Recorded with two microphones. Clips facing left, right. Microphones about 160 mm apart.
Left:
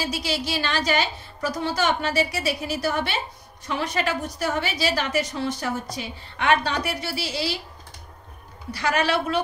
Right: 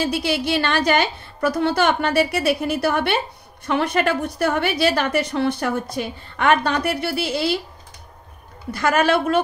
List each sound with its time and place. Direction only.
0.0 s a woman's voice: 55° right (ahead or behind)
8.7 s a woman's voice: 50° right (ahead or behind)